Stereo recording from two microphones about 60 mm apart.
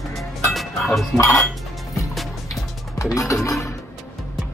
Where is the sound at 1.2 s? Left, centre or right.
Left.